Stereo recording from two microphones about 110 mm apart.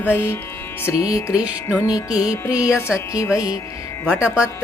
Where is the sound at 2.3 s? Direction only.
30° left (ahead or behind).